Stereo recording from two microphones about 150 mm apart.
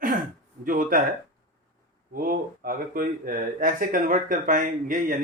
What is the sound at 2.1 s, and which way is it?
Speech, 70° right (ahead or behind).